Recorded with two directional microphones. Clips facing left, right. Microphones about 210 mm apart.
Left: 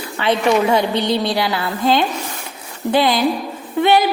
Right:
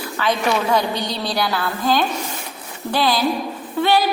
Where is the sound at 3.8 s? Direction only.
15° left (ahead or behind).